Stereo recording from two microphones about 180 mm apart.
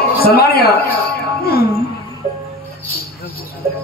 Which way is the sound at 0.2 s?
55° left (ahead or behind).